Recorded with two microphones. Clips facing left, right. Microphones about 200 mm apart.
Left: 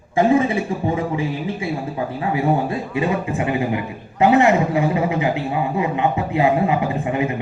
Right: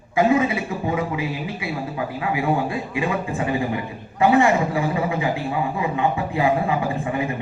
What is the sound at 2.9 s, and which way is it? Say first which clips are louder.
A man's voice: left 3 dB; 20° left (ahead or behind).